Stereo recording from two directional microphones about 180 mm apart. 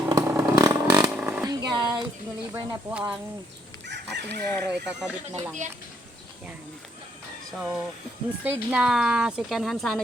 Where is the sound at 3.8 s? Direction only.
75° right (ahead or behind).